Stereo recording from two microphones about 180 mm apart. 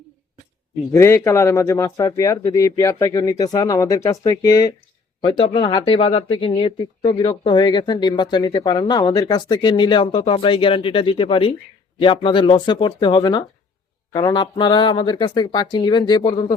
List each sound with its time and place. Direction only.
0.9 s speech: 15° left (ahead or behind)